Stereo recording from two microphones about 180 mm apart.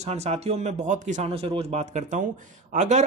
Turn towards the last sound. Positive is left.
turn(degrees=-40)  # may be behind; listen again after turning